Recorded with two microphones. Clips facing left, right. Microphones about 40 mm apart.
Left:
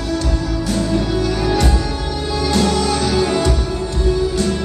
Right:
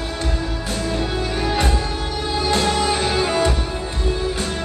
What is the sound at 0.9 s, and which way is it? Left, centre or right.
Music, right.